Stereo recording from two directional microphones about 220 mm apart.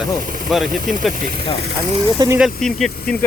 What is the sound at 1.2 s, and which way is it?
Speech, 45° right (ahead or behind).